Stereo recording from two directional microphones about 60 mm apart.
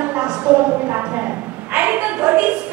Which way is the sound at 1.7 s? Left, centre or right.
Right.